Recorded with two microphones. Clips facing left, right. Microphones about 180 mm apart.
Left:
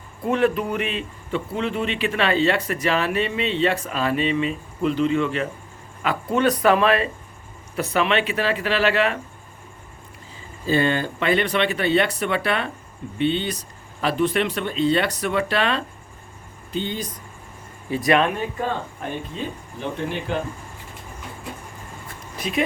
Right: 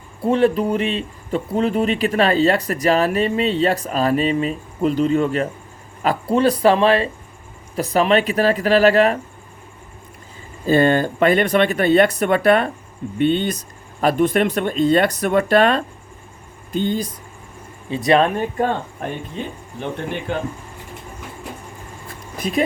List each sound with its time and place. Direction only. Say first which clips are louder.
0.2 s speech: right 4 dB; 30° right (ahead or behind)
10.7 s speech: right 6 dB; 45° right (ahead or behind)
17.8 s speech: right 3 dB; 25° right (ahead or behind)
18.3 s speech: right 6 dB; 50° right (ahead or behind)